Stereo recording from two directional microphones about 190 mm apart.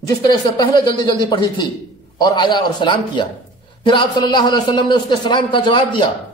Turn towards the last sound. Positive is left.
turn(degrees=25)  # may be behind; listen again after turning